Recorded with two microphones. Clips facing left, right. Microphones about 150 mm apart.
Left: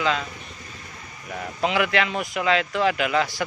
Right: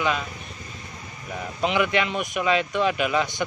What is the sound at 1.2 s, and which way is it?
Speech, 20° right (ahead or behind).